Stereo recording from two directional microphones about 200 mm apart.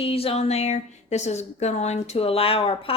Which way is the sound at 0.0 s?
30° left (ahead or behind).